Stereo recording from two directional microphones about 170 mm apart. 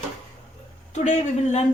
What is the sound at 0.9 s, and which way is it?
Speech, 40° left (ahead or behind).